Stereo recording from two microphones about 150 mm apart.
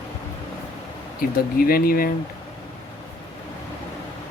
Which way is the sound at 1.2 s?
80° left.